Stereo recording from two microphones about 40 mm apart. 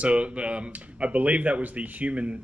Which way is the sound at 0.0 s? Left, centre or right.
Right.